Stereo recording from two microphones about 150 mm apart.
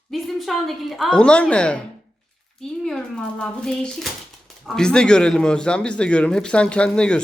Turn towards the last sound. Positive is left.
turn(degrees=5)  # may be behind; listen again after turning